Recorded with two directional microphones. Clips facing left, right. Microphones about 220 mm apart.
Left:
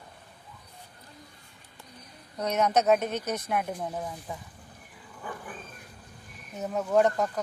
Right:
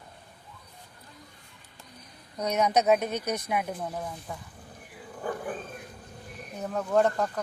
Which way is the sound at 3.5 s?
5° right (ahead or behind).